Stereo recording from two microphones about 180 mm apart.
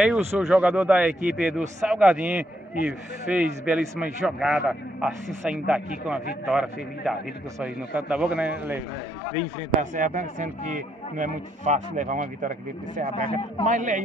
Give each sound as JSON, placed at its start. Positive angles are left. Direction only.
{"t": 0.0, "sound": "a man's voice", "side_deg": -5}
{"t": 9.8, "sound": "speech", "side_deg": -45}
{"t": 13.3, "sound": "speech", "side_deg": 30}
{"t": 13.7, "sound": "speech", "side_deg": -45}